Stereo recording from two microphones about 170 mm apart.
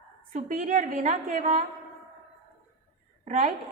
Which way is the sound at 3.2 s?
45° right (ahead or behind).